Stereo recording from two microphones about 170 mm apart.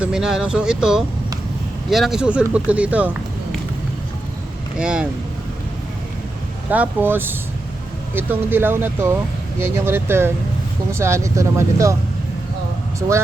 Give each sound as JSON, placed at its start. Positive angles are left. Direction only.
{"t": 0.0, "sound": "speech", "side_deg": -5}
{"t": 4.8, "sound": "speech", "side_deg": -5}
{"t": 6.7, "sound": "speech", "side_deg": -10}